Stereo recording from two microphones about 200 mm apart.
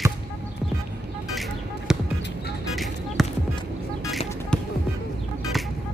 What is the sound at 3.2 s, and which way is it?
Music, centre (ahead or behind).